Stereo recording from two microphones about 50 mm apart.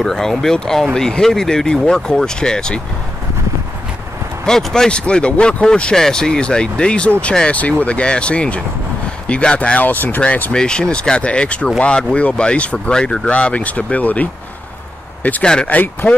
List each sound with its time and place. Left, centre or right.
0.0 s speech: centre
4.5 s speech: centre
9.8 s speech: left
10.5 s speech: centre; by 14.3 s left
15.4 s speech: centre
15.7 s speech: left